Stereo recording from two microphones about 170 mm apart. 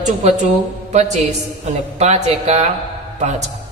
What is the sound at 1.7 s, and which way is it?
A man's voice, 40° right (ahead or behind).